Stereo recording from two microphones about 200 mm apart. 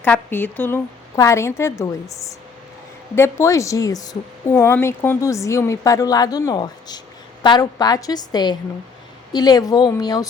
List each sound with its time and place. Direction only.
0.0 s a woman's voice: 10° left (ahead or behind)